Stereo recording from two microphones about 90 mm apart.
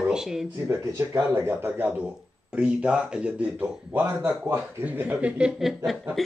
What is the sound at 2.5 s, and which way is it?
Speech, 10° right (ahead or behind).